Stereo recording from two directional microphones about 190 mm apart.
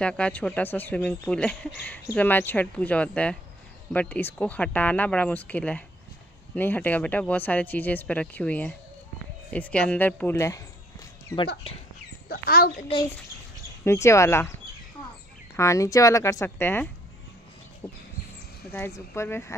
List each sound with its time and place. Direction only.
0.0 s speech: 5° left (ahead or behind)
12.3 s speech: 50° left (ahead or behind)
13.8 s speech: 15° left (ahead or behind)
15.5 s speech: 15° left (ahead or behind)
17.8 s a sound: 30° left (ahead or behind)
18.7 s speech: 15° left (ahead or behind)